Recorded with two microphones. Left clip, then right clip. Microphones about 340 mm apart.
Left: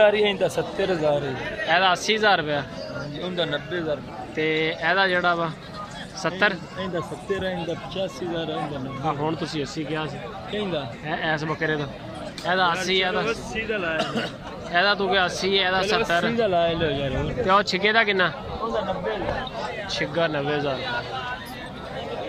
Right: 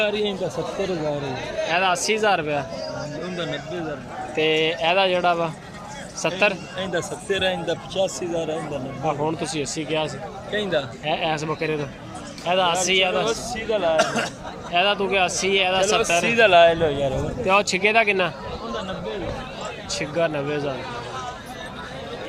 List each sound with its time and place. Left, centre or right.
0.0 s speech: left
1.7 s speech: centre
4.4 s speech: centre
6.7 s speech: right
9.0 s speech: centre
10.5 s speech: right
11.0 s speech: centre
13.9 s a man's voice: right
14.7 s speech: centre
16.3 s speech: right
17.4 s speech: centre
19.9 s speech: centre